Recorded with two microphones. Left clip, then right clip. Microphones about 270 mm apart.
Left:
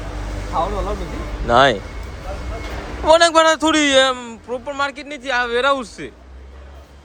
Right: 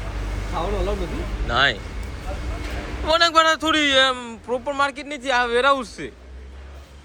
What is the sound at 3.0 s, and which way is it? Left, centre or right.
A man's voice, left.